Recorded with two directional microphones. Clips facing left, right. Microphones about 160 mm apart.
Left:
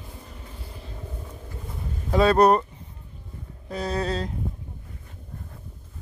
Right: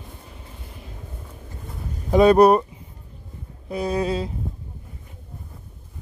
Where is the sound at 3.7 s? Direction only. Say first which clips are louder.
Right 4 dB; 10° right (ahead or behind).